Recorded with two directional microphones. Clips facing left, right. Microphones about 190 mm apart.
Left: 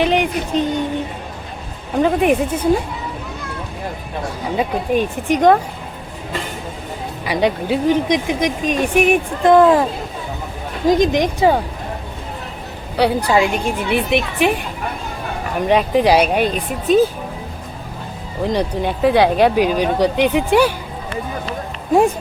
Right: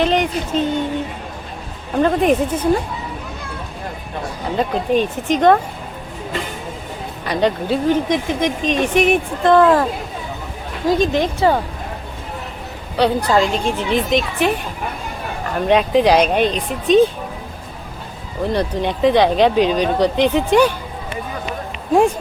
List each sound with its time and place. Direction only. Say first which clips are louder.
0.0 s speech: even; 10° left (ahead or behind)
1.9 s speech: even; 10° left (ahead or behind)
4.5 s speech: right 1 dB; 10° left (ahead or behind)
7.3 s speech: even; 10° left (ahead or behind)
10.8 s speech: left 2 dB; 15° left (ahead or behind)
13.0 s speech: even; 10° left (ahead or behind)
15.5 s speech: right 1 dB; 10° left (ahead or behind)
18.4 s speech: even; 10° left (ahead or behind)